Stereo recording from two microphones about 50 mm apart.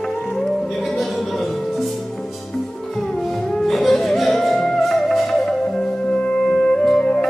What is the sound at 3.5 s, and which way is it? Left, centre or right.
Music, centre.